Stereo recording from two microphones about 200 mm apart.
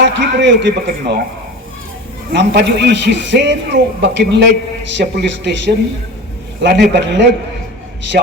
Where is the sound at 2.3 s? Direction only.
60° right (ahead or behind).